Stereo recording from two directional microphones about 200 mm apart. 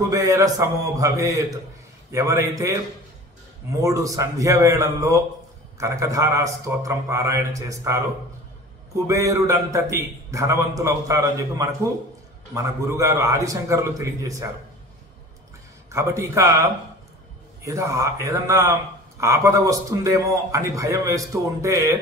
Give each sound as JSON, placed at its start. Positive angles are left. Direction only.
{"t": 0.1, "sound": "a man's voice", "side_deg": -15}
{"t": 3.8, "sound": "a man's voice", "side_deg": -15}
{"t": 9.0, "sound": "a man's voice", "side_deg": -15}
{"t": 15.9, "sound": "a man's voice", "side_deg": -15}
{"t": 17.6, "sound": "a man's voice", "side_deg": -15}